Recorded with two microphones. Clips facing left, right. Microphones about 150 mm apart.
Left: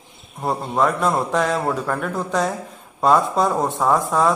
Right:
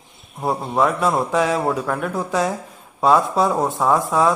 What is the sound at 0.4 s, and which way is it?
A man's voice, centre (ahead or behind).